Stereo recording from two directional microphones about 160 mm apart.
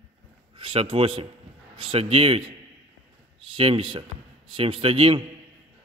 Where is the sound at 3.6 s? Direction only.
35° right (ahead or behind).